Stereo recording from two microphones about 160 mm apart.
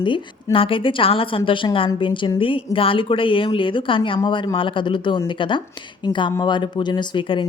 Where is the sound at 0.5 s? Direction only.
35° left (ahead or behind).